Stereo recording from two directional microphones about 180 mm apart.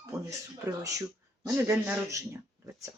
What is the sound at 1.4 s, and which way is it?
Speech, 15° right (ahead or behind).